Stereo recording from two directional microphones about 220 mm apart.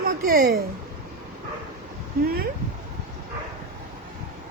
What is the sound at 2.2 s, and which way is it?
Speech, 45° right (ahead or behind).